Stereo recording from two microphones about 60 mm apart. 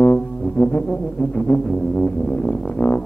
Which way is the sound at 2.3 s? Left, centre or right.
Left.